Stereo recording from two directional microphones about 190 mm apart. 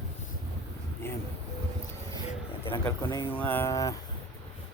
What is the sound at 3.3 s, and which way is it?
Speech, 10° left (ahead or behind).